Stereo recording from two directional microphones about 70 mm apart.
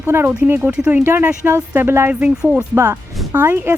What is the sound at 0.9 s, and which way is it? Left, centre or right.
Speech, right.